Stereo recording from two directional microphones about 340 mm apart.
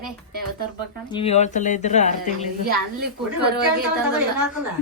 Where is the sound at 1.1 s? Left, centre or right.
Centre.